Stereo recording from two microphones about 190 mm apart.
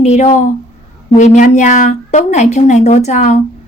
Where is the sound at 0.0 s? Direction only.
35° left (ahead or behind).